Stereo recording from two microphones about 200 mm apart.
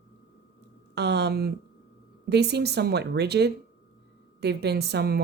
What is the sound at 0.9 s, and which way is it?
A woman's voice, 55° right (ahead or behind).